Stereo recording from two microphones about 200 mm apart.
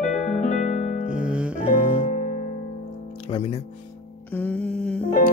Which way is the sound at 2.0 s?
40° left (ahead or behind).